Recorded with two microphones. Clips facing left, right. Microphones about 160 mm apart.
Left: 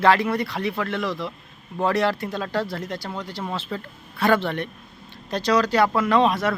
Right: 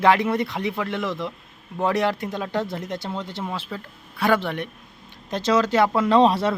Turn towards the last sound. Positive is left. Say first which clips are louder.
# right 2 dB
turn(degrees=-30)  # may be behind; listen again after turning